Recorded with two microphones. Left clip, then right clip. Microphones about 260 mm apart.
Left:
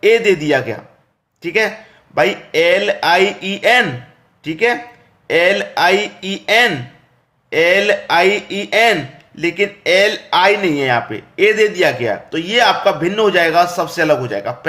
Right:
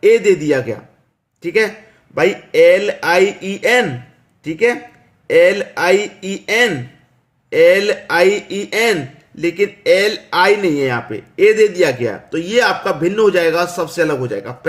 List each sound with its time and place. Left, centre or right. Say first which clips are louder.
0.0 s a man's voice: right 1 dB; centre
5.3 s speech: right 2 dB; centre